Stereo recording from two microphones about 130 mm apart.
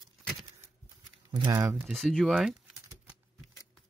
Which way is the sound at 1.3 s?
30° right (ahead or behind).